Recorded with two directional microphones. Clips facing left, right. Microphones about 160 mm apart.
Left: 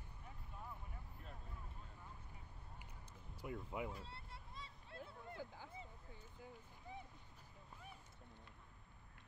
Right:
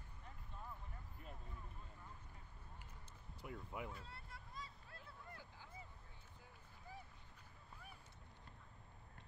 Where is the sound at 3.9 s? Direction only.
25° left (ahead or behind).